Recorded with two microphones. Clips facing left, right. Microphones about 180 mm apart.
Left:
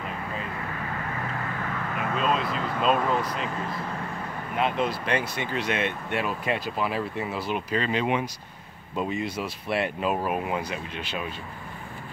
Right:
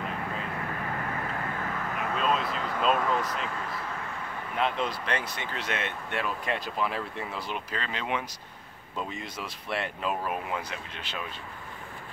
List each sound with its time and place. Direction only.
2.1 s speech: centre (ahead or behind)
4.6 s speech: 10° left (ahead or behind)